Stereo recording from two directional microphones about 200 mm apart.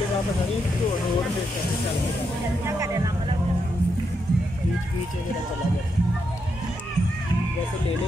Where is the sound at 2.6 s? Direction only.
15° right (ahead or behind).